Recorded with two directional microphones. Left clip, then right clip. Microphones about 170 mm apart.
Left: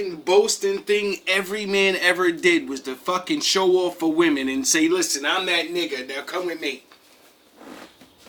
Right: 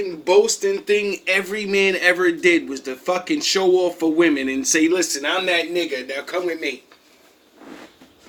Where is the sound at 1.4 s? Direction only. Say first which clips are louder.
Right 2 dB; 25° left (ahead or behind).